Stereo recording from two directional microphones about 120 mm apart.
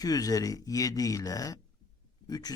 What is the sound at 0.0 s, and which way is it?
Speech, 30° left (ahead or behind).